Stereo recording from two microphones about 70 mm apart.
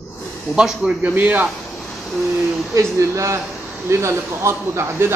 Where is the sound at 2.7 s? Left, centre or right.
Right.